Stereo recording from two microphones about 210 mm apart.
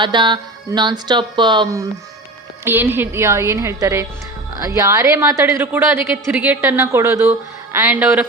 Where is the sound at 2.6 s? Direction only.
10° right (ahead or behind).